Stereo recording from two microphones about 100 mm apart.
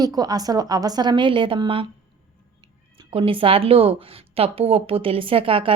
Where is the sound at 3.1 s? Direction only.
65° right (ahead or behind).